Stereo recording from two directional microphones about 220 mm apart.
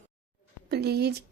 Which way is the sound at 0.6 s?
45° right (ahead or behind).